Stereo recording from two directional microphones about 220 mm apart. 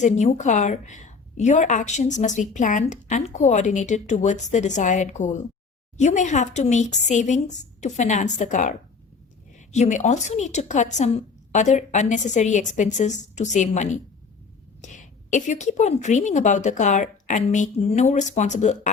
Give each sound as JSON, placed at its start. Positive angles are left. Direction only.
{"t": 0.0, "sound": "a woman's voice", "side_deg": 30}